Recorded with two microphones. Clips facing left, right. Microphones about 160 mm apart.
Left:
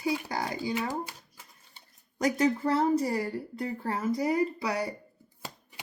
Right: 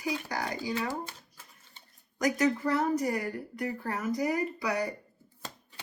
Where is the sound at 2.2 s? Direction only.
30° left (ahead or behind).